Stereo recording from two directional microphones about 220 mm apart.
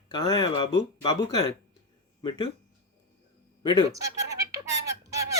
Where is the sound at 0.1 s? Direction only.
15° left (ahead or behind).